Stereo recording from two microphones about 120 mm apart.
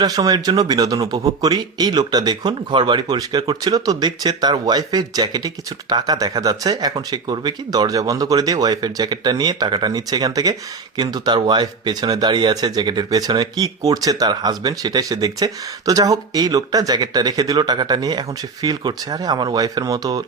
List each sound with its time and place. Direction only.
0.0 s speech: 30° right (ahead or behind)